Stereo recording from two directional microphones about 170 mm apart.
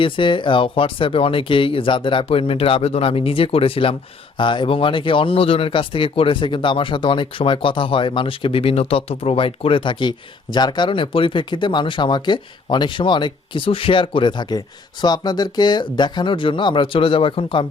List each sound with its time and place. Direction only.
0.0 s speech: 30° left (ahead or behind)